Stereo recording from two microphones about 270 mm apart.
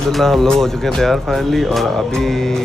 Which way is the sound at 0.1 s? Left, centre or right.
Centre.